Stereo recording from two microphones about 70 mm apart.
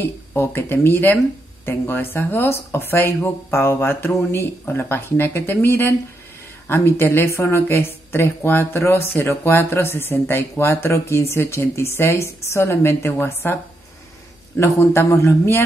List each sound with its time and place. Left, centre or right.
0.0 s speech: left
14.6 s speech: left